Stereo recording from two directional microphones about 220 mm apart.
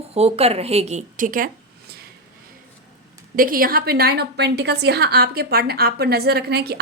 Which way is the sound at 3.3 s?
40° right (ahead or behind).